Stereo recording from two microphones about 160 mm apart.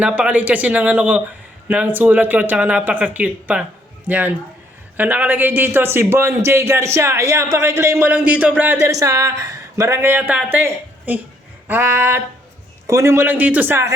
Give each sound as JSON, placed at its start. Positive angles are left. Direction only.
{"t": 0.0, "sound": "a man's voice", "side_deg": -10}